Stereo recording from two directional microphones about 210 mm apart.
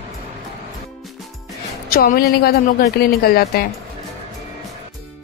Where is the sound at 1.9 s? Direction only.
45° left (ahead or behind).